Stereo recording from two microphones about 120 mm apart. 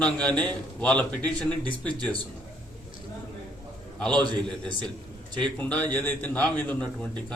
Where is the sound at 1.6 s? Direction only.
40° right (ahead or behind).